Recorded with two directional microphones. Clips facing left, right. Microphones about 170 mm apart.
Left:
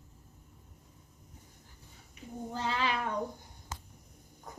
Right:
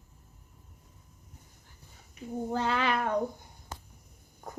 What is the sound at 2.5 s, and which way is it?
Cat, 55° right (ahead or behind).